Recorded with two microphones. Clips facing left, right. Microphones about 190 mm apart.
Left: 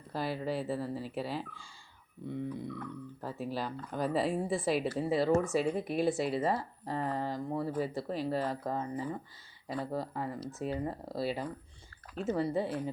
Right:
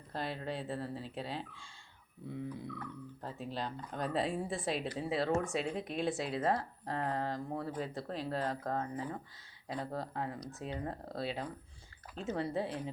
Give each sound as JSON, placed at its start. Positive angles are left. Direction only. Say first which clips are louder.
{"t": 0.1, "sound": "speech", "louder": "left 5 dB", "side_deg": 5}